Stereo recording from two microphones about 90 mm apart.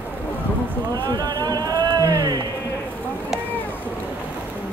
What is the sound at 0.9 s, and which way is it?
Speech, 45° right (ahead or behind).